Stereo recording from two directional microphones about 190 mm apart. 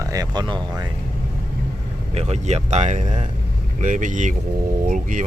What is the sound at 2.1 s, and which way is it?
Speech, 35° right (ahead or behind).